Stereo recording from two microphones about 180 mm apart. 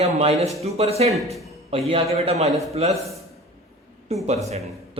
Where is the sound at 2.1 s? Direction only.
35° right (ahead or behind).